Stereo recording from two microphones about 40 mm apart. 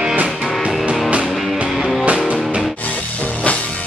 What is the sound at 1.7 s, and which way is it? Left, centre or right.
Music, centre.